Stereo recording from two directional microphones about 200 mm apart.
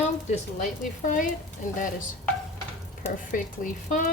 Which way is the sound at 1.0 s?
40° left (ahead or behind).